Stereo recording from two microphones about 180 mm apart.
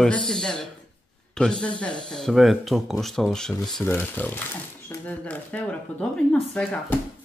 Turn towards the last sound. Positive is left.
turn(degrees=5)  # may be behind; listen again after turning